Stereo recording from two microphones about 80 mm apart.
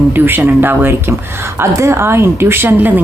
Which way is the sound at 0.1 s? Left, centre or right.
Right.